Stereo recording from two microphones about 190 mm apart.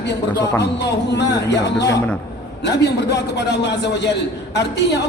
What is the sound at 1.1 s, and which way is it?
A man's voice, 65° left (ahead or behind).